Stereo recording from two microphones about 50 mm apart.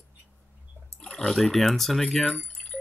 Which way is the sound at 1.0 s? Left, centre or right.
Centre.